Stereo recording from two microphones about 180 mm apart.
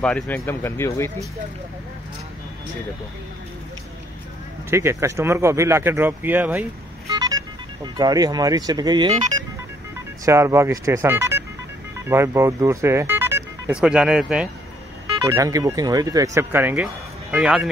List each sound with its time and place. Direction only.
0.0 s speech: 10° left (ahead or behind)
4.6 s speech: 15° right (ahead or behind)
7.1 s speech: 20° right (ahead or behind)
10.2 s speech: 15° right (ahead or behind)
15.2 s speech: 15° right (ahead or behind)